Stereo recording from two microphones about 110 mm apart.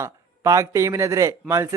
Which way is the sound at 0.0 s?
30° right (ahead or behind).